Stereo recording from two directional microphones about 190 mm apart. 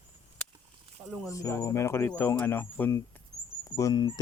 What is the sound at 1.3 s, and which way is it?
Speech, 15° left (ahead or behind).